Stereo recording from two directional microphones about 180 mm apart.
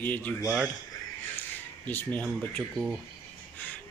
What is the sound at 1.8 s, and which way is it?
Speech, 10° left (ahead or behind).